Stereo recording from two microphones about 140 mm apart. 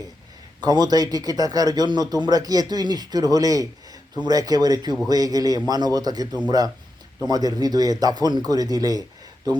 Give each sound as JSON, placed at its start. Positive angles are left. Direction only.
{"t": 0.6, "sound": "a man's voice", "side_deg": -30}
{"t": 7.3, "sound": "a man's voice", "side_deg": -30}